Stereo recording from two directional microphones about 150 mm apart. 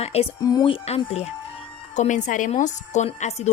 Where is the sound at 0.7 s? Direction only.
40° left (ahead or behind).